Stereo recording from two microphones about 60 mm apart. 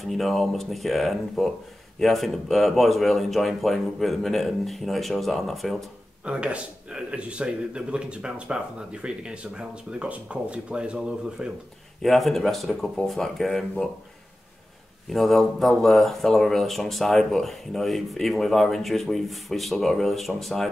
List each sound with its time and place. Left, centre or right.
0.0 s speech: centre
6.2 s speech: centre
12.0 s speech: centre
15.0 s speech: centre